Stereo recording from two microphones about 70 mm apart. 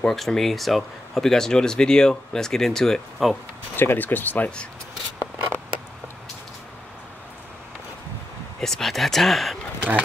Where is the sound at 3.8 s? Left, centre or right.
Left.